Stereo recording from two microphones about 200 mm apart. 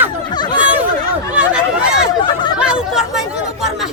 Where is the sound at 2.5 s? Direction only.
5° right (ahead or behind).